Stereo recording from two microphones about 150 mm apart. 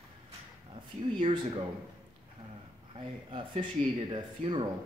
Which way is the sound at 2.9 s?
35° right (ahead or behind).